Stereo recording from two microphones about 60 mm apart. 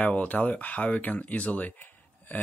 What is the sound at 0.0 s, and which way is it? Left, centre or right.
Speech, left.